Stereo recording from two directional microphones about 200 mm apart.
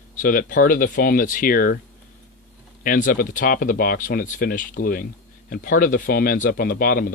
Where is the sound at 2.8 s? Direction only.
40° left (ahead or behind).